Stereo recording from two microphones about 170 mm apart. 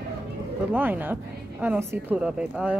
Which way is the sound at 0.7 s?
10° right (ahead or behind).